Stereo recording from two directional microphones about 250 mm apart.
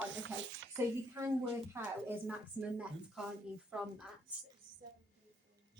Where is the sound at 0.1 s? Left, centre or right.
Right.